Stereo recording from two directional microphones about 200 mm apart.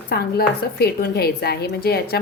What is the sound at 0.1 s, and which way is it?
Speech, 50° left (ahead or behind).